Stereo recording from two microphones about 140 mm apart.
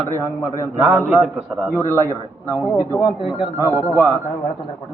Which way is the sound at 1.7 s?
15° left (ahead or behind).